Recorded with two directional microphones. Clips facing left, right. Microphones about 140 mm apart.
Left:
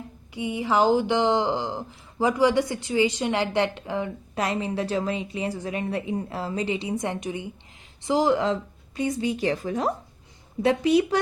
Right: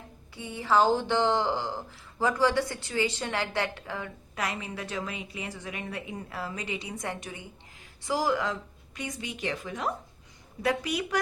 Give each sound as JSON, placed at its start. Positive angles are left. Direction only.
{"t": 0.3, "sound": "speech", "side_deg": 15}